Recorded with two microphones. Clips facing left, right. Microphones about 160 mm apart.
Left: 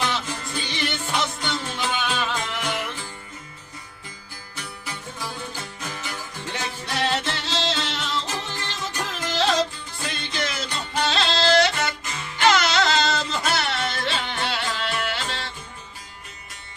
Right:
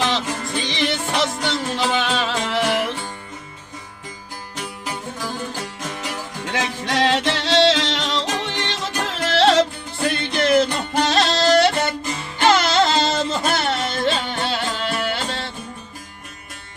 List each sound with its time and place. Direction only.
0.1 s music: 90° right
4.5 s music: 90° right; by 11.3 s 45° right (ahead or behind)
12.4 s music: 30° right (ahead or behind)
13.7 s music: 40° right (ahead or behind)